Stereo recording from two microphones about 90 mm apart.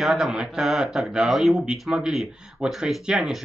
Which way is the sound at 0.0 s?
5° right (ahead or behind).